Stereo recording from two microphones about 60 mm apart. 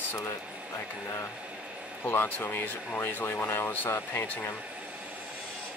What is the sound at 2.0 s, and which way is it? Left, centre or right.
Speech, left.